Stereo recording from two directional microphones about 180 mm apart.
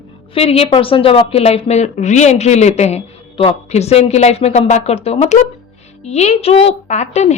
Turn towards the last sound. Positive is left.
turn(degrees=40)  # may be behind; listen again after turning